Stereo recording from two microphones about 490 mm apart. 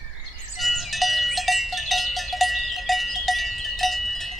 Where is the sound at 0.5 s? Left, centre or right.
Centre.